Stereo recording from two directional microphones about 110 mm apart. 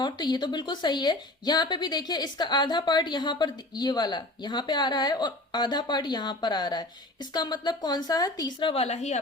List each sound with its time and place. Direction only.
0.0 s a woman's voice: 40° left (ahead or behind)
8.7 s a woman's voice: 75° left (ahead or behind)